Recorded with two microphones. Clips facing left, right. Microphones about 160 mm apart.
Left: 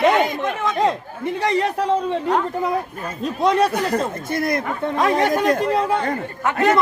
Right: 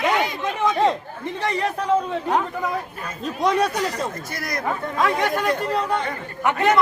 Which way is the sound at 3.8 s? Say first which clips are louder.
Left 4 dB; 55° left (ahead or behind).